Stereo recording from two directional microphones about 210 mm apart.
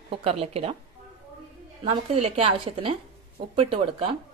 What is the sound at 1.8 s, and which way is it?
Speech, 30° right (ahead or behind).